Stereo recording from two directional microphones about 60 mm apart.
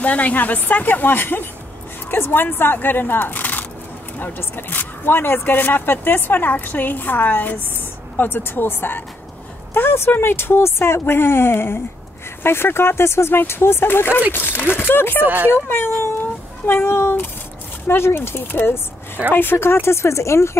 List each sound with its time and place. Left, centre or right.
0.0 s speech: left
15.2 s speech: right
15.5 s speech: left